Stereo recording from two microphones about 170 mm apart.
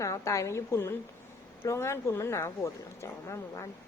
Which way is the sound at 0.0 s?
20° left (ahead or behind).